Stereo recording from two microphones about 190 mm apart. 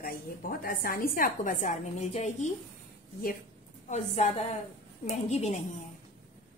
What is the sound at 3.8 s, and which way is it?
A woman's voice, 40° left (ahead or behind).